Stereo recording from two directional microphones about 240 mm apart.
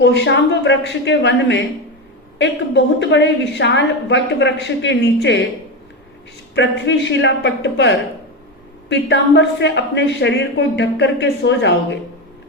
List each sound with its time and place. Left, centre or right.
0.0 s a woman's voice: left
6.5 s a woman's voice: left